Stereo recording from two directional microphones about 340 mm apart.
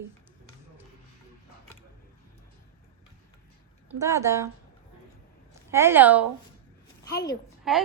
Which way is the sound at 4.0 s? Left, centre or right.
Centre.